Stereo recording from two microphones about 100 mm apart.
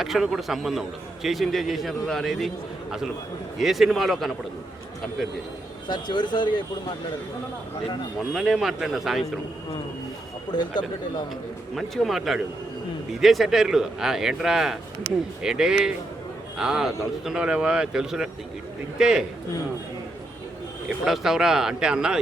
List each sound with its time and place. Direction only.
0.0 s a man's voice: centre (ahead or behind)
3.6 s a man's voice: centre (ahead or behind)
5.9 s speech: 50° left (ahead or behind)
8.3 s a man's voice: centre (ahead or behind)
10.5 s speech: 45° left (ahead or behind)
11.7 s a man's voice: centre (ahead or behind)
21.0 s a man's voice: 5° right (ahead or behind)